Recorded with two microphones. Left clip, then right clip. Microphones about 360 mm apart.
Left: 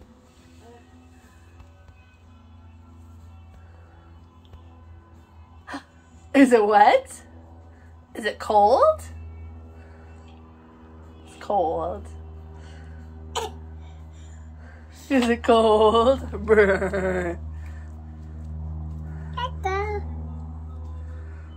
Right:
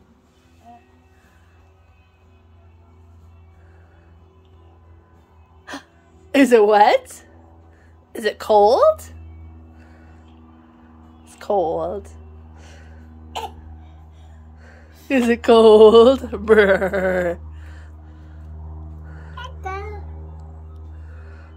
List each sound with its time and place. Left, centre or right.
6.3 s a woman's voice: right
11.3 s speech: right
14.6 s speech: right